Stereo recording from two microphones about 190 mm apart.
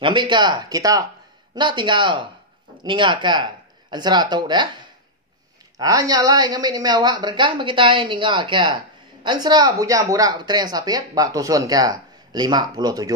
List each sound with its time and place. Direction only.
0.0 s speech: 25° right (ahead or behind)
5.8 s speech: 20° right (ahead or behind)